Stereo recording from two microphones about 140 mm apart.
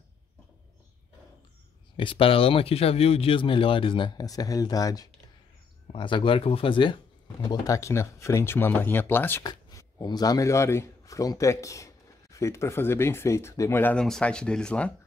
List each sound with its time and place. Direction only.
2.0 s speech: 40° left (ahead or behind)
7.4 s speech: 25° left (ahead or behind)
9.4 s a man's voice: 25° left (ahead or behind)
13.9 s speech: 5° left (ahead or behind)